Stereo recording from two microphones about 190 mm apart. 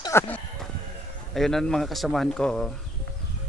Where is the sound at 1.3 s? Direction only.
Centre (ahead or behind).